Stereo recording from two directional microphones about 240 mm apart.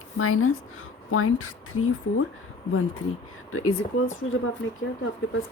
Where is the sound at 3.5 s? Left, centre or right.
Left.